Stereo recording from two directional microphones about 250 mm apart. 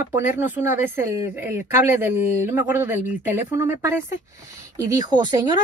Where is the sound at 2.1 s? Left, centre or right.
Left.